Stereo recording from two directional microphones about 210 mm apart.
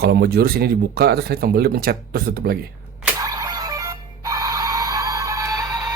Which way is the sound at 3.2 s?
15° right (ahead or behind).